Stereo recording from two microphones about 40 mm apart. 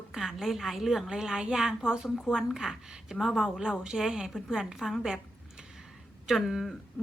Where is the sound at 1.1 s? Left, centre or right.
Centre.